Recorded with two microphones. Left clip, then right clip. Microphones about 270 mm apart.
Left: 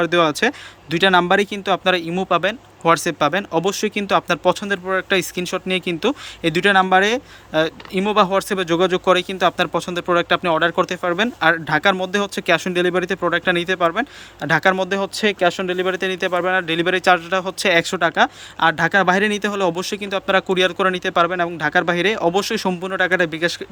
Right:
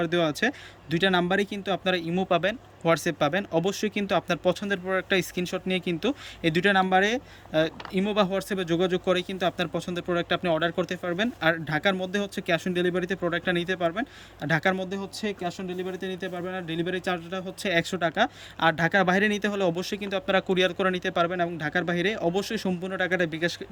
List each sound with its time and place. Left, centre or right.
0.0 s speech: centre